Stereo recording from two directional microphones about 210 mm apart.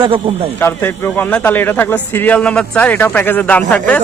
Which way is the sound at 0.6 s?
10° left (ahead or behind).